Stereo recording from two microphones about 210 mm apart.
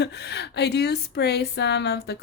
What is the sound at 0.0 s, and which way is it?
Speech, 55° left (ahead or behind).